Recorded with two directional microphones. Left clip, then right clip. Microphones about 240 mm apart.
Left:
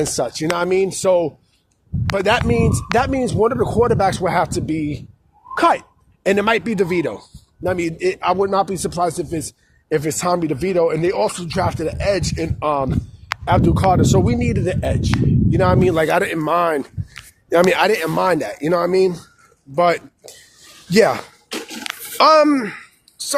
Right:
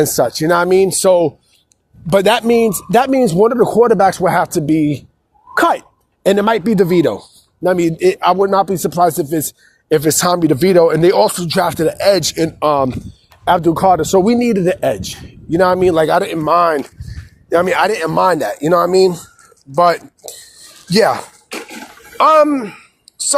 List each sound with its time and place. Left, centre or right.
0.0 s a man's voice: right
13.4 s a man's voice: right
16.0 s speech: centre